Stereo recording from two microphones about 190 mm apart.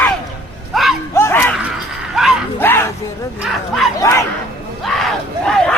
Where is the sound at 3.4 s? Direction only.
Centre (ahead or behind).